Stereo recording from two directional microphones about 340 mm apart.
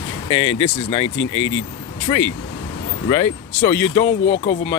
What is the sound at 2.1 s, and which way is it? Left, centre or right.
Speech, centre.